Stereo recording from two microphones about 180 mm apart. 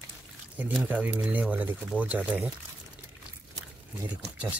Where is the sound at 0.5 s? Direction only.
10° right (ahead or behind).